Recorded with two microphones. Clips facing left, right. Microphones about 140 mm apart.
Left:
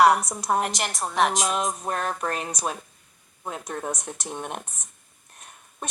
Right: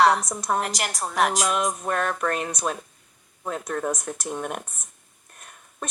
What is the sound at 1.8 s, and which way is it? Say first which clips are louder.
Music: right 3 dB; 35° left (ahead or behind).